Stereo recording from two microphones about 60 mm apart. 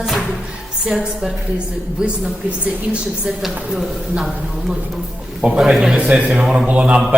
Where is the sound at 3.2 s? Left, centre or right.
Centre.